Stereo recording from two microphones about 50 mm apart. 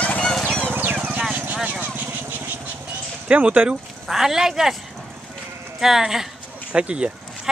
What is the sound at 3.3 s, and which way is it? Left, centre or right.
Speech, right.